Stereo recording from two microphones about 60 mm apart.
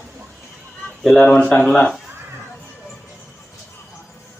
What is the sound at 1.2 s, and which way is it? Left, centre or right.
Speech, centre.